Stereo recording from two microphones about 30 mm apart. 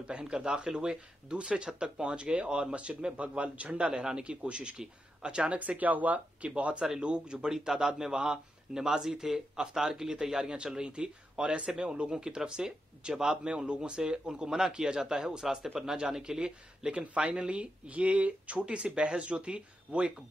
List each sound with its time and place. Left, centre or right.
0.2 s speech: right
5.6 s speech: right
6.5 s speech: right
7.3 s speech: centre
10.6 s speech: right
16.9 s speech: right